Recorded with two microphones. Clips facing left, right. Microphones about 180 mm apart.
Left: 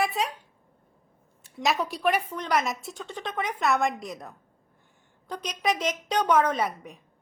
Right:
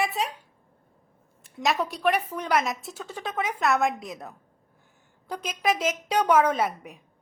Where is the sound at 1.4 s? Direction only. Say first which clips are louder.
Right 1 dB; centre (ahead or behind).